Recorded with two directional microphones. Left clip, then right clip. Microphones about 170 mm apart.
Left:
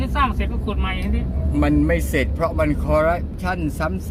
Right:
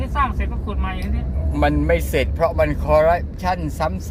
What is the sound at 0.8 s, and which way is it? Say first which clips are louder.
Speech: left 2 dB; 5° left (ahead or behind).